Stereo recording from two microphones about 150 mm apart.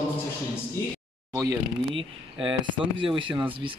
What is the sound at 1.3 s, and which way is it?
Speech, 25° right (ahead or behind).